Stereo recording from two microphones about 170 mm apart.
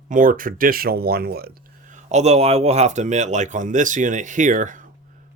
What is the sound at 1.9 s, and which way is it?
Speech, 40° right (ahead or behind).